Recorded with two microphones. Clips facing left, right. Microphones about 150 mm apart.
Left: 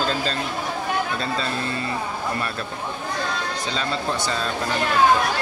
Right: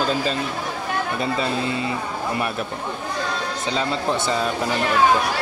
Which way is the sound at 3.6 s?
20° right (ahead or behind).